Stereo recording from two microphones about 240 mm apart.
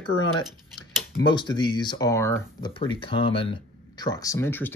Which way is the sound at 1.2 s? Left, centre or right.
Centre.